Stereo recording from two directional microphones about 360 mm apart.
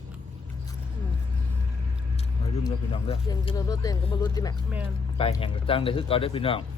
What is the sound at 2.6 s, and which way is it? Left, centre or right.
Speech, centre.